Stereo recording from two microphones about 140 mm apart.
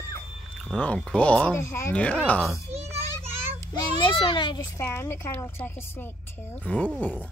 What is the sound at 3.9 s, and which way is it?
Speech, 35° left (ahead or behind).